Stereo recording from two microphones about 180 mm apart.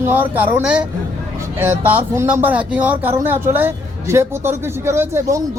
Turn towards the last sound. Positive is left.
turn(degrees=-15)  # may be behind; listen again after turning